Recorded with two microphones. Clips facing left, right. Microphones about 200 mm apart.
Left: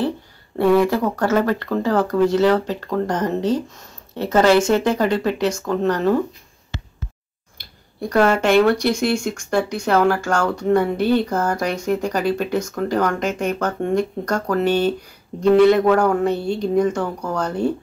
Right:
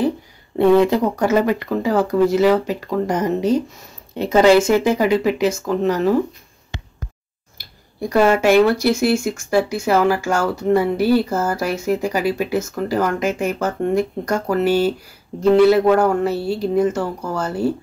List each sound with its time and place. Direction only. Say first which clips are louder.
0.6 s speech: right 2 dB; 20° right (ahead or behind)
7.5 s speech: right 2 dB; 10° right (ahead or behind)